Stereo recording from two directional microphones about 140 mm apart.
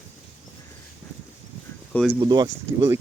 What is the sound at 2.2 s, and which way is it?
Speech, 30° right (ahead or behind).